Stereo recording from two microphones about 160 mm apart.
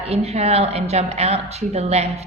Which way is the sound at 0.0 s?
40° right (ahead or behind).